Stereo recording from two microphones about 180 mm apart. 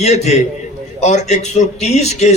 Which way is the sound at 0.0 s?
40° left (ahead or behind).